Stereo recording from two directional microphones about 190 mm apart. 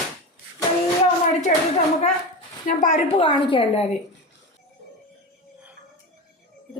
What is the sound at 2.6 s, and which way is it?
A woman's voice, 40° left (ahead or behind).